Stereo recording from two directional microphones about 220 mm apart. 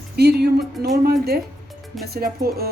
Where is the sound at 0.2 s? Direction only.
50° right (ahead or behind).